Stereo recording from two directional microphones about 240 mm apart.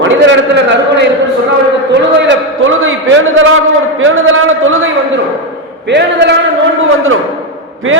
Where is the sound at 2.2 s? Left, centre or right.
Right.